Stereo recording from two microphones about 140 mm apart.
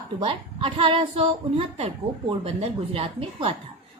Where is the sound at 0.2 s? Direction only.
40° right (ahead or behind).